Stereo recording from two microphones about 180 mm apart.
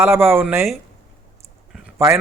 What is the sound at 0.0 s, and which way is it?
Speech, 15° right (ahead or behind).